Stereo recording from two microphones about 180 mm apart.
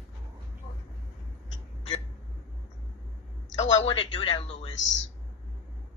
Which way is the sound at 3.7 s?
30° left (ahead or behind).